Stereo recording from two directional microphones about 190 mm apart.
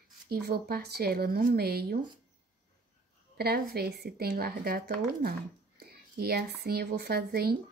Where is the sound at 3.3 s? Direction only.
55° right (ahead or behind).